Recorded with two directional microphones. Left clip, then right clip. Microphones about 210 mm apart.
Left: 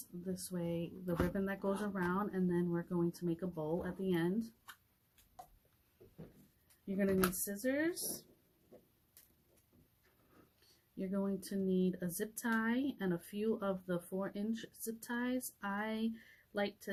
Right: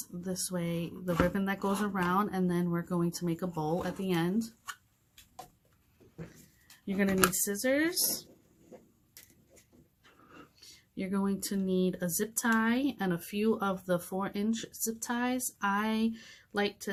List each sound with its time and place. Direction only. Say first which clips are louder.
0.2 s speech: right 7 dB; 35° right (ahead or behind)
7.4 s speech: right 7 dB; 35° right (ahead or behind)
10.9 s speech: right 5 dB; 35° right (ahead or behind)